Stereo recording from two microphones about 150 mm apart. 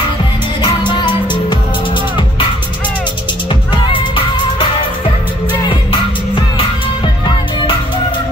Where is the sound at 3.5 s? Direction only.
35° left (ahead or behind).